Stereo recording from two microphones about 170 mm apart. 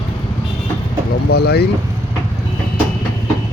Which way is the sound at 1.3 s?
70° left (ahead or behind).